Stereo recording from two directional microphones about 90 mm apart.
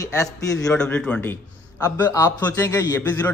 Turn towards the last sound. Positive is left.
turn(degrees=20)  # may be behind; listen again after turning